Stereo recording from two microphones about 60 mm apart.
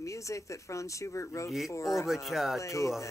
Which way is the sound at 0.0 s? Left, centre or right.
Left.